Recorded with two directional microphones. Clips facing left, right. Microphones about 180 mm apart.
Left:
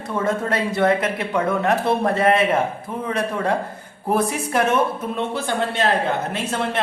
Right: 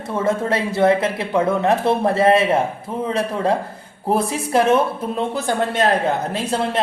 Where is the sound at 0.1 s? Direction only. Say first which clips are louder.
Right 2 dB; 25° right (ahead or behind).